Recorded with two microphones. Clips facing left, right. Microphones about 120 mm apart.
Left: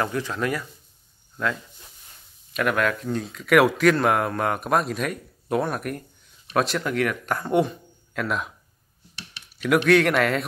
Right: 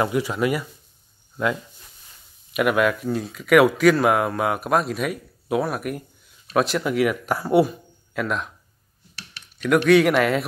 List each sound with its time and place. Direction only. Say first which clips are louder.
0.0 s speech: right 4 dB; 15° right (ahead or behind)
2.5 s speech: right 4 dB; 10° right (ahead or behind)
9.8 s speech: right 3 dB; centre (ahead or behind)